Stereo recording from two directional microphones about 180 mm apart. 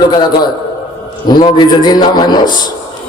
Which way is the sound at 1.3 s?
25° left (ahead or behind).